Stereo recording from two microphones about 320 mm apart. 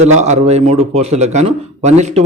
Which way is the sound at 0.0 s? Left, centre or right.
Right.